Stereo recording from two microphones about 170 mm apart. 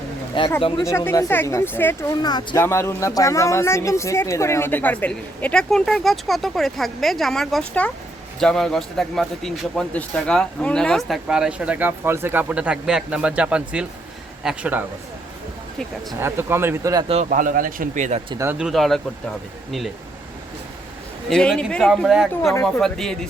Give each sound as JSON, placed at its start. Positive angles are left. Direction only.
{"t": 0.4, "sound": "speech", "side_deg": 30}
{"t": 0.9, "sound": "speech", "side_deg": 15}
{"t": 2.2, "sound": "a man's voice", "side_deg": 25}
{"t": 16.1, "sound": "speech", "side_deg": -15}
{"t": 17.2, "sound": "speech", "side_deg": -50}
{"t": 18.6, "sound": "a man's voice", "side_deg": 0}
{"t": 21.2, "sound": "a man's voice", "side_deg": 5}